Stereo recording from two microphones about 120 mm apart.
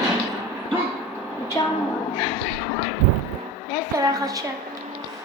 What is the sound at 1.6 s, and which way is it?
Speech, 30° left (ahead or behind).